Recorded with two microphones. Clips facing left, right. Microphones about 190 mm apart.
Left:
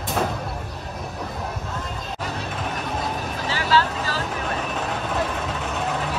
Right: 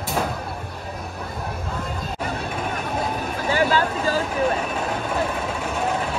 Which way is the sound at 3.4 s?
50° right (ahead or behind).